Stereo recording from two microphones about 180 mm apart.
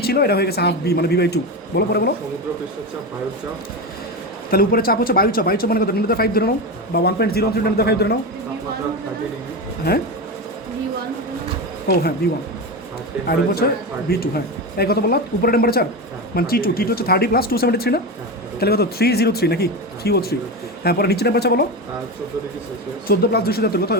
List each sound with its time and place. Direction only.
0.0 s speech: 60° left (ahead or behind)
4.5 s speech: 55° left (ahead or behind)
13.2 s speech: 60° left (ahead or behind)
23.0 s speech: 60° left (ahead or behind)